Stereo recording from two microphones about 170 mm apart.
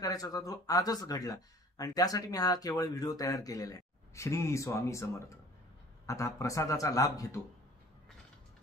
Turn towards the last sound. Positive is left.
turn(degrees=20)  # may be behind; listen again after turning